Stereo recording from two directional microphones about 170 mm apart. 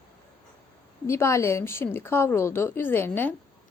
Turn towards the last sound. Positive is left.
turn(degrees=10)  # may be behind; listen again after turning